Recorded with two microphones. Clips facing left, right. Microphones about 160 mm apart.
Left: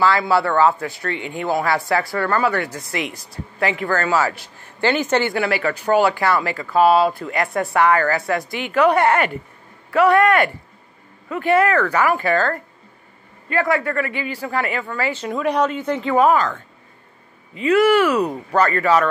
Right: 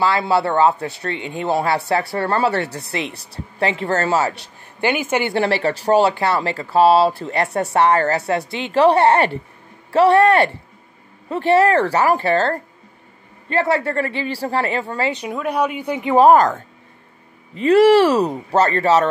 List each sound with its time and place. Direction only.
0.0 s speech: 20° right (ahead or behind)
3.9 s speech: 35° right (ahead or behind)
4.2 s speech: 20° right (ahead or behind)
5.3 s speech: 30° right (ahead or behind)
15.0 s speech: 15° right (ahead or behind)
15.3 s speech: 5° right (ahead or behind)
16.2 s speech: 40° right (ahead or behind)